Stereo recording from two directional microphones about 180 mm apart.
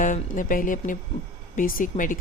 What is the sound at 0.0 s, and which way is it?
A woman's voice, 45° left (ahead or behind).